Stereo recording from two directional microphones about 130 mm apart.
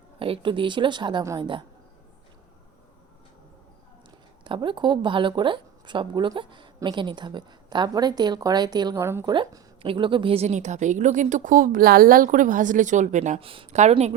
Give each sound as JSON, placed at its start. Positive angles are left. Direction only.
{"t": 0.2, "sound": "speech", "side_deg": -40}
{"t": 4.4, "sound": "speech", "side_deg": -40}
{"t": 9.0, "sound": "speech", "side_deg": -20}
{"t": 9.2, "sound": "a woman's voice", "side_deg": -40}
{"t": 13.4, "sound": "speech", "side_deg": -45}
{"t": 13.7, "sound": "a woman's voice", "side_deg": -60}